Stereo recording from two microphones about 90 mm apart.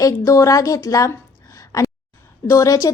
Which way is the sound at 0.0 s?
35° left (ahead or behind).